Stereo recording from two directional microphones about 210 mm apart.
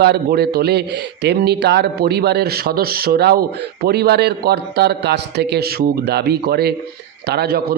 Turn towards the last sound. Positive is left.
turn(degrees=-50)  # may be behind; listen again after turning